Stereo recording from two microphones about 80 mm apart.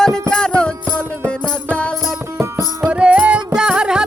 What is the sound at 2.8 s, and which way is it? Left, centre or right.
Music, centre.